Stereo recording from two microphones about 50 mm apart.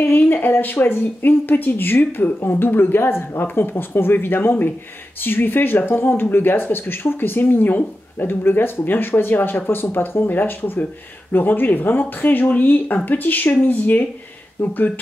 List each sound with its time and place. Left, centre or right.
0.0 s speech: left